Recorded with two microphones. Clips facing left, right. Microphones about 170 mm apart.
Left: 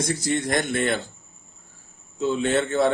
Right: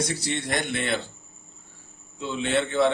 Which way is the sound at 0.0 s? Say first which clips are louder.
Left 4 dB; 45° left (ahead or behind).